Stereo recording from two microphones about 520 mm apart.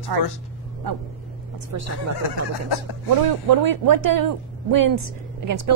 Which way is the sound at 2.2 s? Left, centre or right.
Left.